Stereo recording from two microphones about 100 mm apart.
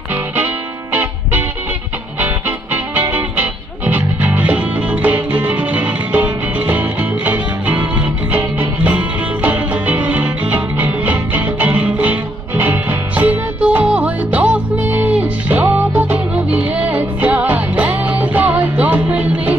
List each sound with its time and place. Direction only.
2.1 s music: 20° right (ahead or behind)